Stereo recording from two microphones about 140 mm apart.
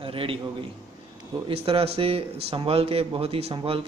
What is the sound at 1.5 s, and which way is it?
A man's voice, 40° right (ahead or behind).